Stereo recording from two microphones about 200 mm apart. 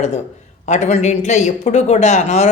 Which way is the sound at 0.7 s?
35° left (ahead or behind).